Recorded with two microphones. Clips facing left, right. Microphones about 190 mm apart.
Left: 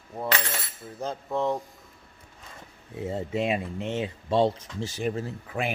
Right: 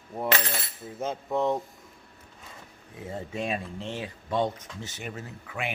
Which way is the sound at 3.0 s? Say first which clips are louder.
Left 5 dB; 25° left (ahead or behind).